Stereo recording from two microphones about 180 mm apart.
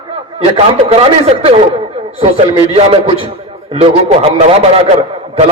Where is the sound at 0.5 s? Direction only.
30° right (ahead or behind).